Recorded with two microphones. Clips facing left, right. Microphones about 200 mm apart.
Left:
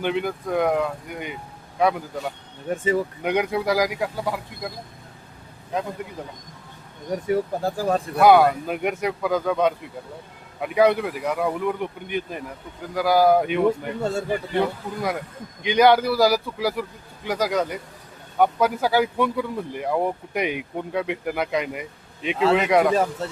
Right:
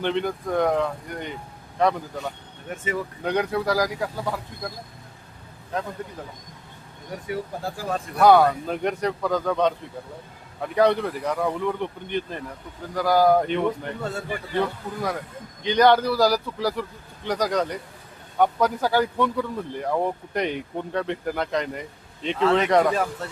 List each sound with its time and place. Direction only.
0.0 s speech: 5° left (ahead or behind)
2.6 s speech: 30° left (ahead or behind)
3.2 s speech: 15° left (ahead or behind)
7.3 s speech: 40° left (ahead or behind)
8.2 s speech: 10° left (ahead or behind)
14.0 s speech: 25° left (ahead or behind)
14.5 s speech: 15° left (ahead or behind)